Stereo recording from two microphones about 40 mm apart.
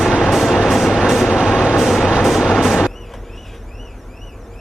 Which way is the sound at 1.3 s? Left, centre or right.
Centre.